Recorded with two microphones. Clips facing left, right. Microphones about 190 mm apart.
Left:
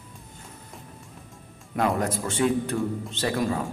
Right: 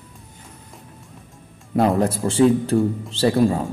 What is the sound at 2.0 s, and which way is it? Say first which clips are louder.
A man's voice: right 8 dB; 30° right (ahead or behind).